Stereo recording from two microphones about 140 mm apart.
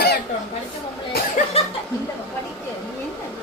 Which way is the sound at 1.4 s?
60° left (ahead or behind).